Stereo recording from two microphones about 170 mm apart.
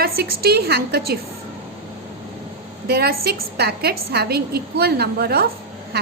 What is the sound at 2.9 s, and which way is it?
A woman's voice, 70° right (ahead or behind).